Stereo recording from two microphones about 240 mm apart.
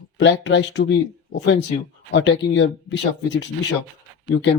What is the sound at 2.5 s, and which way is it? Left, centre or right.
Speech, left.